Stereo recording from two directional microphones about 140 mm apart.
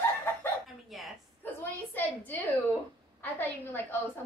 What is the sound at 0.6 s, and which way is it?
Speech, centre (ahead or behind).